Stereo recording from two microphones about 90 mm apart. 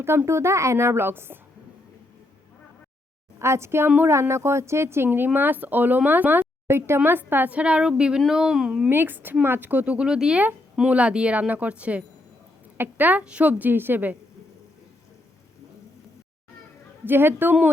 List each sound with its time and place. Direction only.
0.0 s speech: 25° right (ahead or behind)
3.3 s speech: 30° right (ahead or behind); by 8.7 s 5° right (ahead or behind)
8.9 s speech: 20° right (ahead or behind)
17.1 s speech: 25° right (ahead or behind)